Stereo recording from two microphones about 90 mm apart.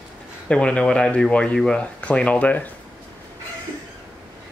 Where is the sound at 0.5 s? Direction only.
10° left (ahead or behind).